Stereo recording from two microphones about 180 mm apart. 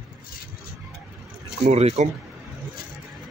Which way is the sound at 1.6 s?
35° right (ahead or behind).